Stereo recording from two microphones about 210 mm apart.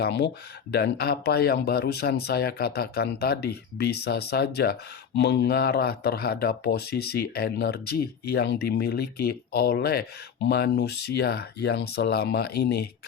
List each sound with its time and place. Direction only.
0.0 s speech: 55° left (ahead or behind)